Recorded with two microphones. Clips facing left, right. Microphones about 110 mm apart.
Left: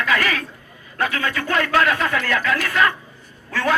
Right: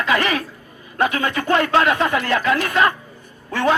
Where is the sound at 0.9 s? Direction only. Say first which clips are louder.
Right 3 dB; 20° right (ahead or behind).